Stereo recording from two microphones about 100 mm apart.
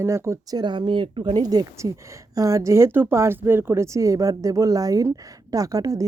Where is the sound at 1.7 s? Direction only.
30° right (ahead or behind).